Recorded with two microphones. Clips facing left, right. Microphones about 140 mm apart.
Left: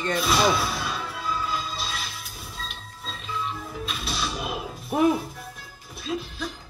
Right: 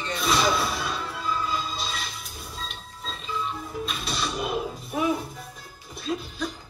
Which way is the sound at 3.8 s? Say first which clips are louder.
Even; centre (ahead or behind).